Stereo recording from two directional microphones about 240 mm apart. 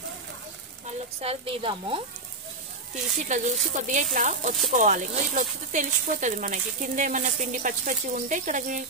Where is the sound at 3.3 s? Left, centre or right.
Right.